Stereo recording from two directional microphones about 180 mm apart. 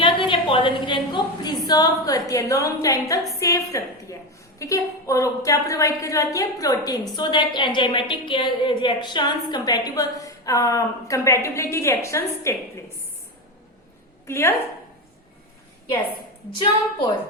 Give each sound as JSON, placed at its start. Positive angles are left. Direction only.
{"t": 0.0, "sound": "a sound", "side_deg": 30}
{"t": 1.6, "sound": "a woman's voice", "side_deg": 20}
{"t": 14.3, "sound": "a woman's voice", "side_deg": 15}